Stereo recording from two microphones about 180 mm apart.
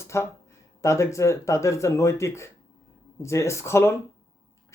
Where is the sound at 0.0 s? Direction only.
15° left (ahead or behind).